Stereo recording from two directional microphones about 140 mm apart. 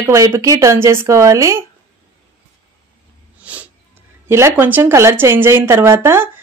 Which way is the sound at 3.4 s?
10° right (ahead or behind).